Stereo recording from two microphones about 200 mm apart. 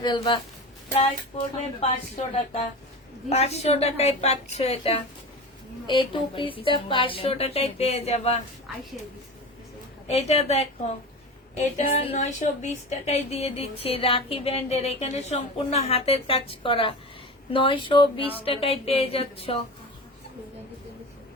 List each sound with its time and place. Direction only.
0.0 s speech: 20° left (ahead or behind)
1.8 s a woman's voice: 30° left (ahead or behind)
10.1 s a woman's voice: 30° left (ahead or behind)